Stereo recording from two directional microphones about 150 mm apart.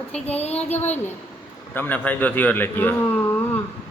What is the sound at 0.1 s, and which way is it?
Speech, 45° left (ahead or behind).